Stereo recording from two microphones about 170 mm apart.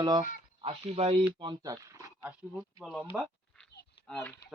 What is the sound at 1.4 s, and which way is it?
Speech, 25° right (ahead or behind).